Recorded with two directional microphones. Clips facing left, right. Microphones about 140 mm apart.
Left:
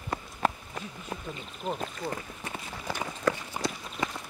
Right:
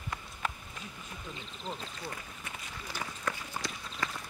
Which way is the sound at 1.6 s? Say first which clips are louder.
Left 8 dB; 55° left (ahead or behind).